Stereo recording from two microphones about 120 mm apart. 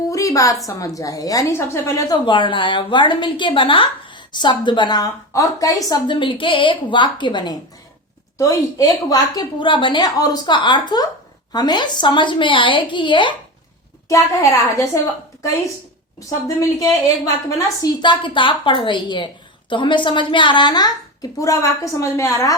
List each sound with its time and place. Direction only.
0.1 s a sound: 25° left (ahead or behind)
0.7 s a woman's voice: 30° left (ahead or behind)
2.1 s a woman's voice: 40° left (ahead or behind)
14.1 s a woman's voice: 25° left (ahead or behind)
16.6 s a woman's voice: 30° left (ahead or behind)
18.0 s a woman's voice: 40° left (ahead or behind)